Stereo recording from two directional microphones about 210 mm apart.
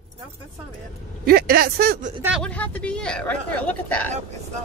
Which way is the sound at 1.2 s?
45° right (ahead or behind).